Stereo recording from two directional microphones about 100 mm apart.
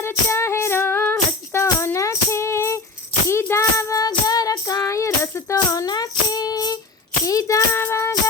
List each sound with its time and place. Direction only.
0.0 s music: 25° left (ahead or behind)
3.2 s child singing: 25° left (ahead or behind)
5.5 s music: 40° left (ahead or behind)
7.3 s child singing: 35° left (ahead or behind)
7.8 s music: 25° left (ahead or behind)